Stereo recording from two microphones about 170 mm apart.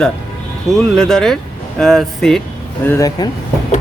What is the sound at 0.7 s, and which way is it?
Speech, 5° left (ahead or behind).